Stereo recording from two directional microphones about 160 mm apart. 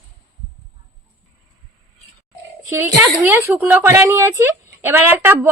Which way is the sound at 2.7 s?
15° right (ahead or behind).